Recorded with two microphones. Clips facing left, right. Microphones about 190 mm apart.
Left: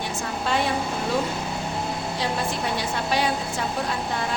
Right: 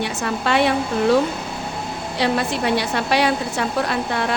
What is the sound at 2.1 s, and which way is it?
A woman's voice, 70° right (ahead or behind).